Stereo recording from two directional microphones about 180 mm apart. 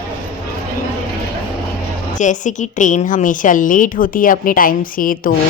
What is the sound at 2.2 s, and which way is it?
A woman's voice, 45° left (ahead or behind).